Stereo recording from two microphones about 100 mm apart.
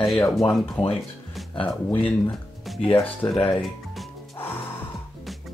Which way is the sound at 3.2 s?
15° left (ahead or behind).